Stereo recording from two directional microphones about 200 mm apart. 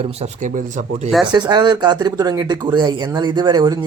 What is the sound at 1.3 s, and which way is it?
Speech, 20° right (ahead or behind).